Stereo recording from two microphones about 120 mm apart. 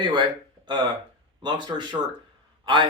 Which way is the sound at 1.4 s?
40° right (ahead or behind).